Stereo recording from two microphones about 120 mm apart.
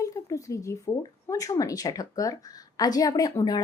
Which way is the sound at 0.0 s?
25° left (ahead or behind).